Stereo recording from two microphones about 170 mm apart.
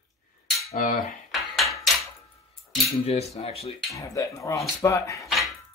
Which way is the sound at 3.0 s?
35° left (ahead or behind).